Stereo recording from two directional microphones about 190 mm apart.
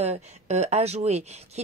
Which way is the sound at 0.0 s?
35° right (ahead or behind).